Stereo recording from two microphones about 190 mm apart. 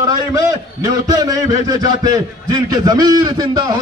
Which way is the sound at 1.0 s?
20° right (ahead or behind).